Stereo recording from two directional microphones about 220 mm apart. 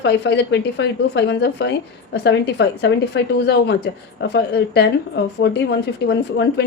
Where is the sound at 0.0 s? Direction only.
50° left (ahead or behind).